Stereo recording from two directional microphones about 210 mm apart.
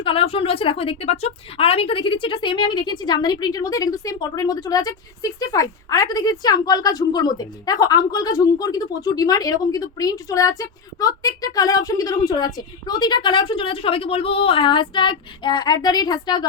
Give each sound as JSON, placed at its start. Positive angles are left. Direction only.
{"t": 0.0, "sound": "a woman's voice", "side_deg": 25}